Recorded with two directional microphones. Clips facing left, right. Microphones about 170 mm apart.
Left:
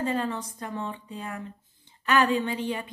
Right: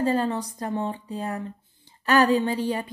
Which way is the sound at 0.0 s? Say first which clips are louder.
Right 5 dB; 35° right (ahead or behind).